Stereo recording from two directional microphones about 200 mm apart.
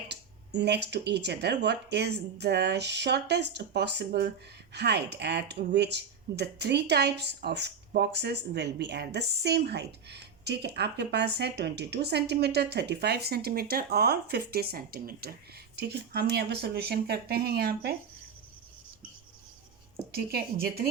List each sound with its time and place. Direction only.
0.1 s speech: 60° right (ahead or behind)
20.1 s a woman's voice: 50° right (ahead or behind)